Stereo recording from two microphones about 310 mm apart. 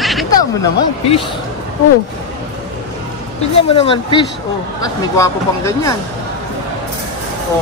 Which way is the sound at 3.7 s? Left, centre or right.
Centre.